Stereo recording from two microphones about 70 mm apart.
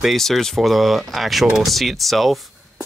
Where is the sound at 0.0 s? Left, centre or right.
Centre.